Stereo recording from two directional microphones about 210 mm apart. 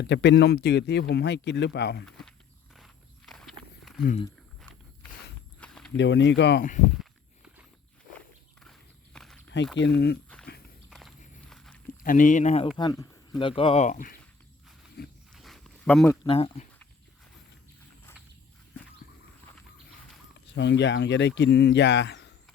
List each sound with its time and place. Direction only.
0.0 s speech: 55° left (ahead or behind)
2.0 s walk: centre (ahead or behind)
2.7 s wild animals: centre (ahead or behind)
5.5 s walk: 5° left (ahead or behind)
5.9 s speech: 60° left (ahead or behind)
9.1 s walk: 5° left (ahead or behind)
9.7 s speech: 55° left (ahead or behind)
10.2 s walk: 5° left (ahead or behind)
12.0 s speech: 40° left (ahead or behind)
15.0 s a sound: 50° left (ahead or behind)
15.3 s a sound: centre (ahead or behind)
16.2 s speech: 25° left (ahead or behind)
20.5 s speech: 55° left (ahead or behind)